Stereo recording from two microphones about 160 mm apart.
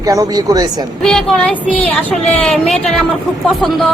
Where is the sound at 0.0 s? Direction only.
20° right (ahead or behind).